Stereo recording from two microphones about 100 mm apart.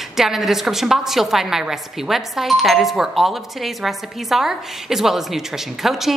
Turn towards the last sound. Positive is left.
turn(degrees=-5)  # may be behind; listen again after turning